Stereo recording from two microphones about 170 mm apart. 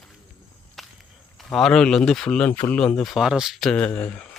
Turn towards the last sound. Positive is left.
turn(degrees=10)  # may be behind; listen again after turning